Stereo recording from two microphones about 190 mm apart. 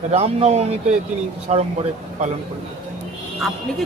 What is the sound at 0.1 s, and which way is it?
Speech, 35° right (ahead or behind).